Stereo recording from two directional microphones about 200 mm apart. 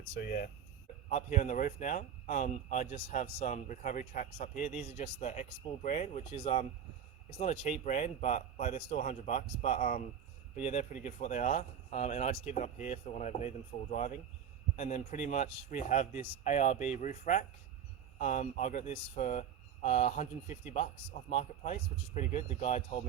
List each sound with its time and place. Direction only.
0.2 s speech: 45° left (ahead or behind)